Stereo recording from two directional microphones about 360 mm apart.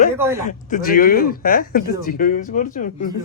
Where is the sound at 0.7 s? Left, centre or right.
Left.